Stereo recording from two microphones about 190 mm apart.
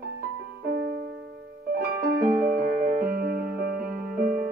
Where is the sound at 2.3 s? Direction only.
15° right (ahead or behind).